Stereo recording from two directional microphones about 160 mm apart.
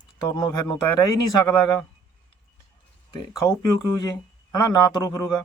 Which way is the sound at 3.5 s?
25° left (ahead or behind).